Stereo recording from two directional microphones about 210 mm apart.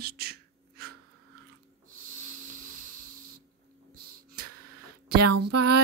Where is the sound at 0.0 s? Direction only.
45° right (ahead or behind).